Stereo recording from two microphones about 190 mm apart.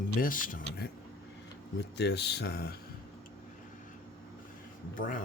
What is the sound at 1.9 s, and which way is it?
Speech, 60° left (ahead or behind).